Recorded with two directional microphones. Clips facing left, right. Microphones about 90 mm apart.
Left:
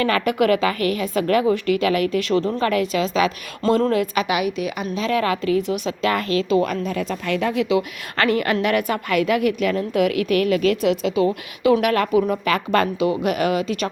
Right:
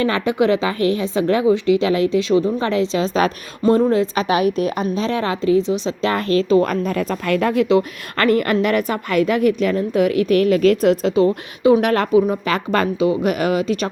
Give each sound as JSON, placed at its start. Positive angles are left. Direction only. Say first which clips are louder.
{"t": 0.0, "sound": "a woman's voice", "louder": "right 1 dB", "side_deg": -25}